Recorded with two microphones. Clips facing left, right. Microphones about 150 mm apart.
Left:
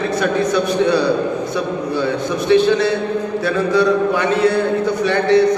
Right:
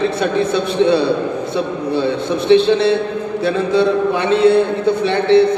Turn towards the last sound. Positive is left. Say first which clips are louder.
# right 1 dB
turn(degrees=-25)  # may be behind; listen again after turning